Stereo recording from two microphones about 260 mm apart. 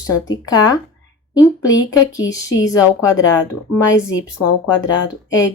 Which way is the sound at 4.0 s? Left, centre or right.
Left.